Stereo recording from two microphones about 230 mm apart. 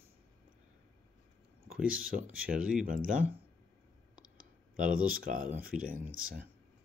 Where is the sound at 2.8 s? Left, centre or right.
Right.